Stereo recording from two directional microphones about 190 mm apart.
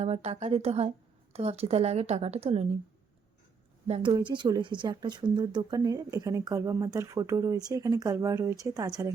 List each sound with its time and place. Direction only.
0.0 s a woman's voice: 35° right (ahead or behind)
3.8 s a woman's voice: 35° right (ahead or behind); by 9.1 s 15° right (ahead or behind)